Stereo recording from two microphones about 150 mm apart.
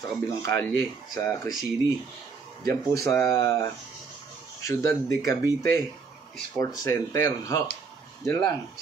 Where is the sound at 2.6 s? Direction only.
20° left (ahead or behind).